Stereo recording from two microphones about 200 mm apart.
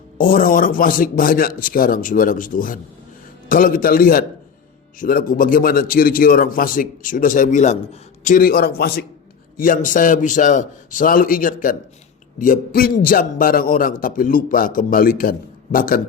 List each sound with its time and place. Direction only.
0.2 s a man's voice: 45° left (ahead or behind)